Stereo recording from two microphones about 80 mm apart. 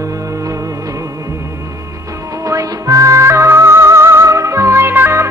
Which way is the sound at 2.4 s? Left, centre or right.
Right.